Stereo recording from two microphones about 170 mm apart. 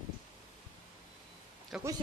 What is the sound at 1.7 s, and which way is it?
Speech, centre (ahead or behind).